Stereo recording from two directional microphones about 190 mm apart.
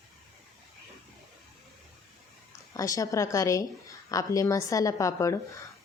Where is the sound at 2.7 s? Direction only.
15° left (ahead or behind).